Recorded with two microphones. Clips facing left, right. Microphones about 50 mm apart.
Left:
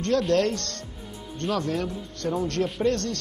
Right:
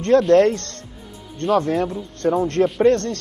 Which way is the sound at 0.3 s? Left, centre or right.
Right.